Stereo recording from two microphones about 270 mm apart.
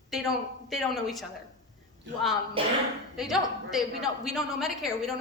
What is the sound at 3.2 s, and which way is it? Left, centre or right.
A woman's voice, centre.